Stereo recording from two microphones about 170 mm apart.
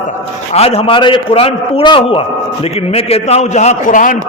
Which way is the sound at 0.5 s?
35° left (ahead or behind).